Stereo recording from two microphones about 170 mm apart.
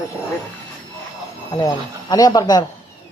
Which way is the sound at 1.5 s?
20° left (ahead or behind).